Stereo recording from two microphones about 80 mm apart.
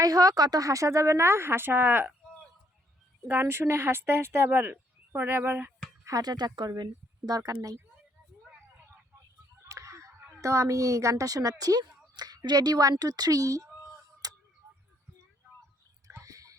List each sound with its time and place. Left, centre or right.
0.0 s speech: right
3.2 s speech: right
6.1 s speech: right
9.6 s a sound: right
10.4 s speech: right
14.2 s tick-tock: right
16.2 s whispering: right